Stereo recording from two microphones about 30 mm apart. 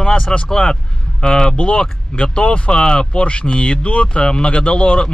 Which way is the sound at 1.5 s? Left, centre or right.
Left.